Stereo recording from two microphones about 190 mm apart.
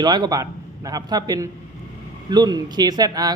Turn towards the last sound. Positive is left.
turn(degrees=-20)  # may be behind; listen again after turning